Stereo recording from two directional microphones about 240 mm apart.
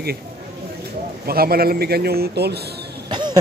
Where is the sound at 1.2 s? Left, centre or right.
Right.